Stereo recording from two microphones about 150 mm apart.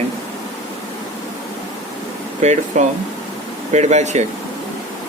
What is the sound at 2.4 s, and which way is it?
Speech, 50° right (ahead or behind).